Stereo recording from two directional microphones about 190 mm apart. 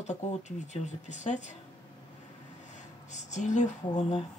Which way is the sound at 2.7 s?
40° left (ahead or behind).